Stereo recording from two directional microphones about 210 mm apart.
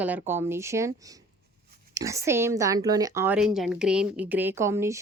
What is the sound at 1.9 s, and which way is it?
A woman's voice, 15° right (ahead or behind).